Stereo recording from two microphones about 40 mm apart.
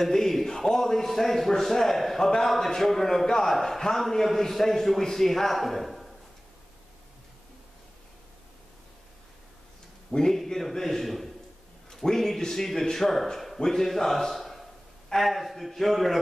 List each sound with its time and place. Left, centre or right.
0.0 s a man's voice: centre
10.3 s a man's voice: centre